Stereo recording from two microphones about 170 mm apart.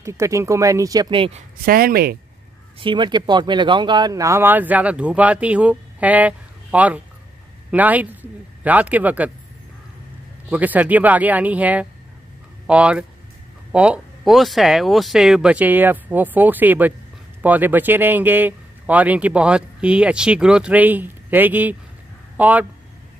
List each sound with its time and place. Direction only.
0.0 s speech: 15° right (ahead or behind)
1.6 s speech: 60° right (ahead or behind)
2.8 s a man's voice: 25° right (ahead or behind); by 9.3 s 10° right (ahead or behind)
10.5 s a man's voice: 10° right (ahead or behind)